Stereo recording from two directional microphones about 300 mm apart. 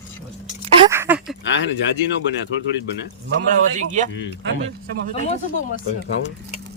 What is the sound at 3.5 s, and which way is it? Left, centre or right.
Speech, right.